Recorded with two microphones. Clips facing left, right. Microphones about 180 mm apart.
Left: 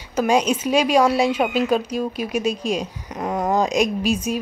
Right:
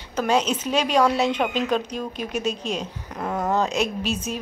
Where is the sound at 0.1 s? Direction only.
10° left (ahead or behind).